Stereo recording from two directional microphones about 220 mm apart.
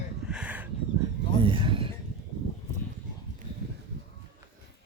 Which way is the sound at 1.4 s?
25° right (ahead or behind).